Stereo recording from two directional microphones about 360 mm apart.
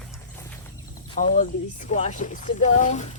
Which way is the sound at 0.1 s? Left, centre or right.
Centre.